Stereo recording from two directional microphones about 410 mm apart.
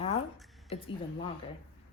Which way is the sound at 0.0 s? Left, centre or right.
Centre.